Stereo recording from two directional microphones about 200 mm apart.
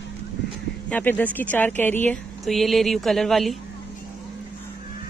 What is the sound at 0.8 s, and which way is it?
Speech, 10° left (ahead or behind).